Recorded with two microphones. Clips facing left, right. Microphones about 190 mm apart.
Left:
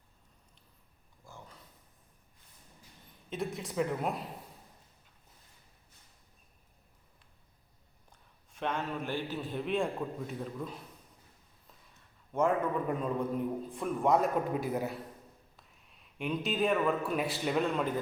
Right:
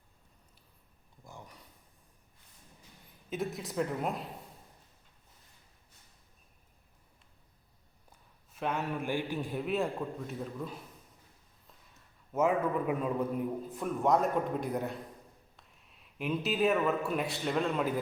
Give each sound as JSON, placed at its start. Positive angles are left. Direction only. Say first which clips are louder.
{"t": 1.2, "sound": "a sound", "louder": "right 2 dB", "side_deg": -15}
{"t": 3.2, "sound": "a man's voice", "louder": "right 1 dB", "side_deg": 0}
{"t": 8.5, "sound": "a man's voice", "louder": "right 1 dB", "side_deg": -5}
{"t": 12.3, "sound": "a man's voice", "louder": "right 1 dB", "side_deg": -5}